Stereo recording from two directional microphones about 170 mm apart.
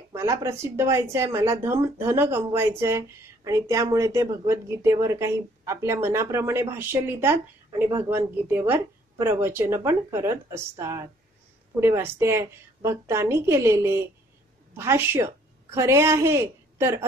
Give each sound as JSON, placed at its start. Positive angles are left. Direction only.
{"t": 0.1, "sound": "a woman's voice", "side_deg": -15}